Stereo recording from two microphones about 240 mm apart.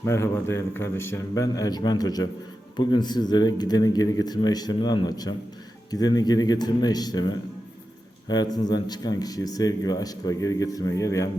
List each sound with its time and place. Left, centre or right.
0.0 s speech: centre